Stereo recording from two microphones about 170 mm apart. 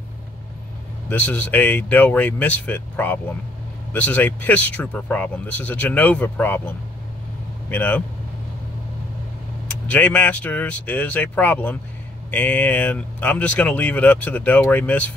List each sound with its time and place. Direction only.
1.0 s speech: 10° left (ahead or behind)
7.7 s speech: 10° left (ahead or behind)
9.7 s speech: 10° left (ahead or behind)